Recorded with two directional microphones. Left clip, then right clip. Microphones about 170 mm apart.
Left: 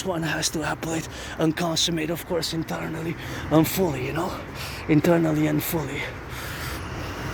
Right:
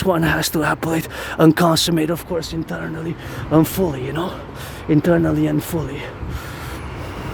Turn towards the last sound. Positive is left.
turn(degrees=-35)  # may be behind; listen again after turning